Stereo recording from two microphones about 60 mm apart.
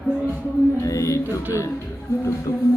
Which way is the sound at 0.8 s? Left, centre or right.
Left.